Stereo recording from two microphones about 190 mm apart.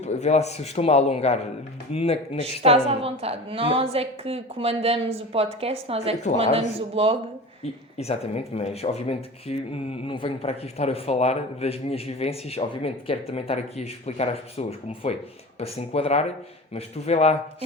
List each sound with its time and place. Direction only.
0.0 s speech: 35° left (ahead or behind)
2.4 s a woman's voice: 30° right (ahead or behind)
7.6 s speech: 35° left (ahead or behind)